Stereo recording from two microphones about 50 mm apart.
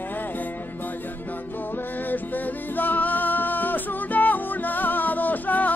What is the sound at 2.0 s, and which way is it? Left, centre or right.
Music, left.